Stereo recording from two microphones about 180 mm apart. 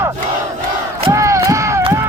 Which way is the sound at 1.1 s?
15° right (ahead or behind).